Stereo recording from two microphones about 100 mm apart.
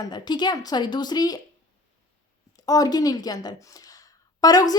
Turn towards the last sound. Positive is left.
turn(degrees=40)  # may be behind; listen again after turning